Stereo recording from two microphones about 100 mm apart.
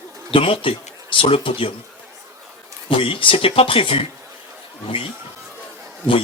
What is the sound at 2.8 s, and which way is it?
Speech, 65° left (ahead or behind).